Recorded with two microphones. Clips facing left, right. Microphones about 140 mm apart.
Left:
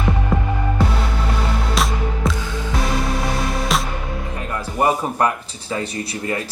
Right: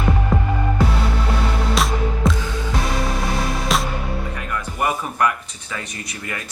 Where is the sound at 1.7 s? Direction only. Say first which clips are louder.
Right 1 dB; centre (ahead or behind).